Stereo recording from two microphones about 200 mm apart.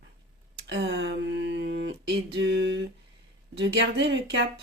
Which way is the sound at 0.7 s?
60° right (ahead or behind).